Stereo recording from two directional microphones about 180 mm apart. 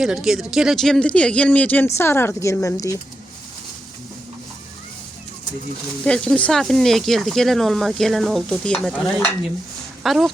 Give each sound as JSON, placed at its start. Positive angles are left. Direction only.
{"t": 0.0, "sound": "speech", "side_deg": -5}
{"t": 6.1, "sound": "speech", "side_deg": 5}